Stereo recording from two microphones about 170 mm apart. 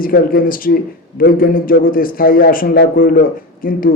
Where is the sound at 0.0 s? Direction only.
55° left (ahead or behind).